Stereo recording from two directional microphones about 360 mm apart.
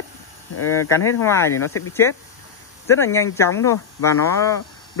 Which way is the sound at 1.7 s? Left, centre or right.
Left.